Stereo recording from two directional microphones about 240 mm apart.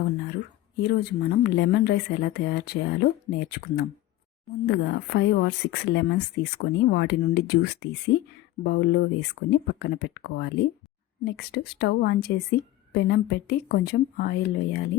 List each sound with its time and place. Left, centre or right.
0.8 s a woman's voice: left